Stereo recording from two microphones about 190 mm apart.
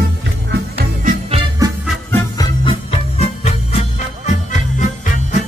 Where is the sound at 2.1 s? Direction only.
20° left (ahead or behind).